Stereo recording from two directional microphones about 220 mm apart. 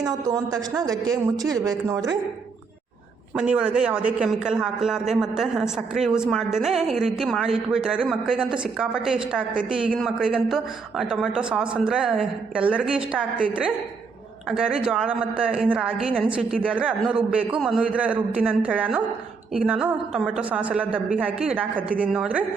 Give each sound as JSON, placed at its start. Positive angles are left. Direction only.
{"t": 0.0, "sound": "speech", "side_deg": -15}
{"t": 3.3, "sound": "a man's voice", "side_deg": -5}